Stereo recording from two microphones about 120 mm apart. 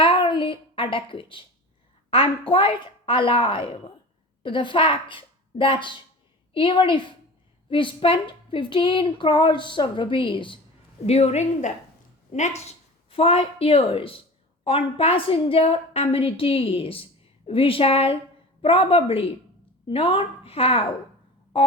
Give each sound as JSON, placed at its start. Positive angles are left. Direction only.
{"t": 0.0, "sound": "a sound", "side_deg": 45}
{"t": 2.0, "sound": "a woman's voice", "side_deg": 45}
{"t": 11.0, "sound": "a woman's voice", "side_deg": 60}